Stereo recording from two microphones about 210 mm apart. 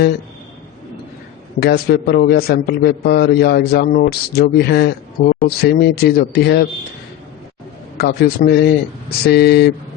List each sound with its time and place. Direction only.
1.5 s a man's voice: 50° left (ahead or behind)
7.9 s a man's voice: 50° left (ahead or behind)